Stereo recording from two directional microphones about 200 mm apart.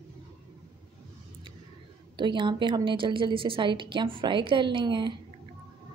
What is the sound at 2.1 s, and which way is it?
A woman's voice, 25° right (ahead or behind).